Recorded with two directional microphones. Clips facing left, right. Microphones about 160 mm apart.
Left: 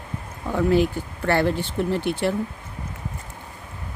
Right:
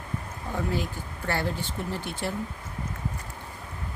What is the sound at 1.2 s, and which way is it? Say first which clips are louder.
Speech: left 8 dB; 65° left (ahead or behind).